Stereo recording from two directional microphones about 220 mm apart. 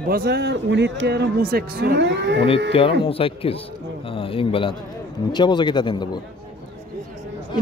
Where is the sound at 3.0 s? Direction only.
25° left (ahead or behind).